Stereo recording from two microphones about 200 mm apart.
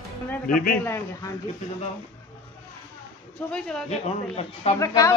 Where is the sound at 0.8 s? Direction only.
15° left (ahead or behind).